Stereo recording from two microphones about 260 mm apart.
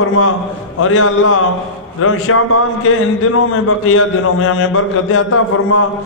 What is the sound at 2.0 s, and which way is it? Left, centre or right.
Speech, left.